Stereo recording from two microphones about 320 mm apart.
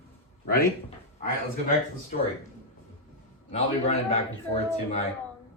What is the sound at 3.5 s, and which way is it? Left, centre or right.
A man's voice, centre.